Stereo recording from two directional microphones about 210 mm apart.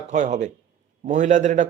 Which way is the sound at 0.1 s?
35° right (ahead or behind).